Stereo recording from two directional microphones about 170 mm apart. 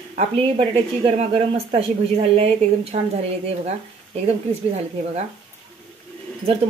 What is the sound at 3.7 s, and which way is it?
Speech, 40° right (ahead or behind).